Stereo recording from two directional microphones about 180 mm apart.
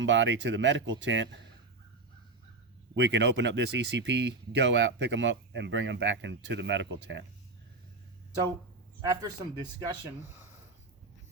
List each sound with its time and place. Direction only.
0.0 s speech: 90° right
2.9 s speech: 75° right (ahead or behind)
9.0 s a man's voice: 20° right (ahead or behind)